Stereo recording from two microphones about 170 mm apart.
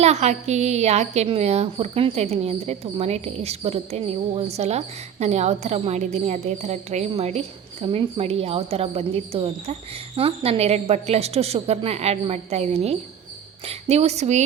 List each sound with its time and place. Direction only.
0.0 s a woman's voice: 40° right (ahead or behind)